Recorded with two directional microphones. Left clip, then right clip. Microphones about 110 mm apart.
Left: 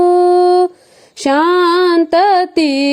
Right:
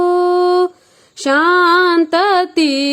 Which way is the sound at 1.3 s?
40° left (ahead or behind).